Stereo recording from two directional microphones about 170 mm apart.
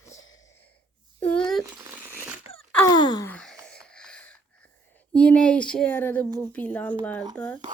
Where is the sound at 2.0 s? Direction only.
10° right (ahead or behind).